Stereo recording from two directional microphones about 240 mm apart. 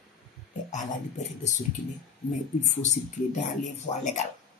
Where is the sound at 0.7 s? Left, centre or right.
Left.